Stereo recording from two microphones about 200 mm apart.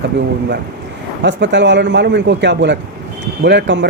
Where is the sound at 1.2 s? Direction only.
60° right (ahead or behind).